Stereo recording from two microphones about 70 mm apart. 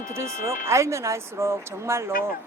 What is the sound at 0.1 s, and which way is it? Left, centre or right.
Speech, right.